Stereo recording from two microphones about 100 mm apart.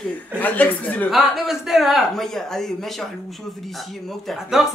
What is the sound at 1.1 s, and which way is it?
Speech, centre (ahead or behind).